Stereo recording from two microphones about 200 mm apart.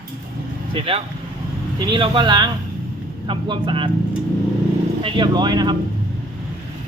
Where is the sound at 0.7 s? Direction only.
30° right (ahead or behind).